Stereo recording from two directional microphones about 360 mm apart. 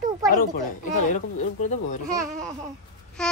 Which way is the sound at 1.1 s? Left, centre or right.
Centre.